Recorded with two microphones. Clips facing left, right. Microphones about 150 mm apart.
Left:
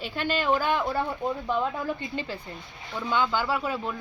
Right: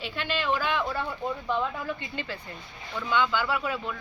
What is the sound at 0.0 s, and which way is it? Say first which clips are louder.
Speech: left 3 dB; 45° left (ahead or behind).